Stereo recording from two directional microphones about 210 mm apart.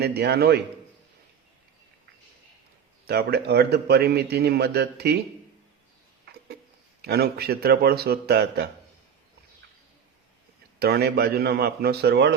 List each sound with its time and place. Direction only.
0.0 s a man's voice: 50° right (ahead or behind)
3.1 s a man's voice: 50° right (ahead or behind)
7.0 s a man's voice: 50° right (ahead or behind)
10.8 s a man's voice: 50° right (ahead or behind)